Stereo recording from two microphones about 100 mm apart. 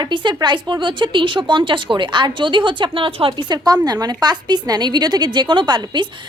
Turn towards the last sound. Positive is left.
turn(degrees=-45)  # may be behind; listen again after turning